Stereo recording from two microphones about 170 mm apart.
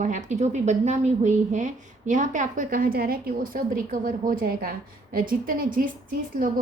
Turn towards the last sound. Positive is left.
turn(degrees=-55)  # may be behind; listen again after turning